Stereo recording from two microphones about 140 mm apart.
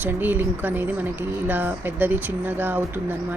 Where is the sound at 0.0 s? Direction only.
15° right (ahead or behind).